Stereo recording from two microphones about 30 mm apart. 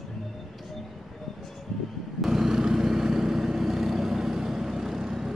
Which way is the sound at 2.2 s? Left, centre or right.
Centre.